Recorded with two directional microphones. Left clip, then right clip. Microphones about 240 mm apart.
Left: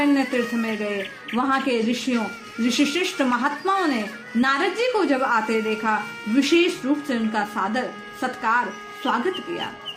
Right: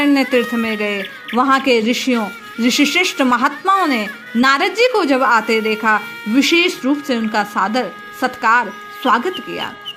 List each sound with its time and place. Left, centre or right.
0.0 s speech: right